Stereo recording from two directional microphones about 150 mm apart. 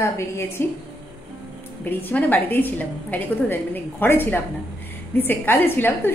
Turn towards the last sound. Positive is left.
turn(degrees=15)  # may be behind; listen again after turning